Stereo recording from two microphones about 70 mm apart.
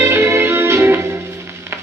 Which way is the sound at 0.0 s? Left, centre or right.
Right.